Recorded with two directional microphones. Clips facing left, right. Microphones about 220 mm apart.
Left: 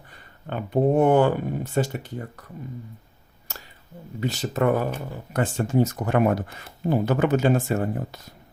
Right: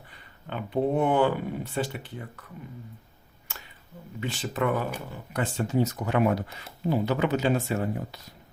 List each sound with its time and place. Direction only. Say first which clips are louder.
0.5 s speech: left 5 dB; 45° left (ahead or behind)
3.5 s a sound: left 3 dB; 40° left (ahead or behind)
4.2 s speech: left 5 dB; 40° left (ahead or behind)